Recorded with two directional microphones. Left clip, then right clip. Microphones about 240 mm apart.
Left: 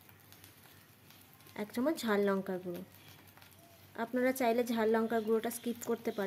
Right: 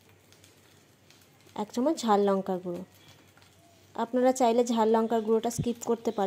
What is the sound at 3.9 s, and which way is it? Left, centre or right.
A woman's voice, centre.